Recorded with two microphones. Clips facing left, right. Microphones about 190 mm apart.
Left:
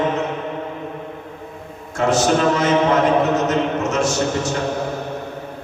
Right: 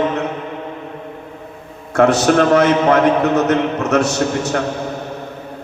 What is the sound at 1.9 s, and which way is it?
A man's voice, 65° right (ahead or behind).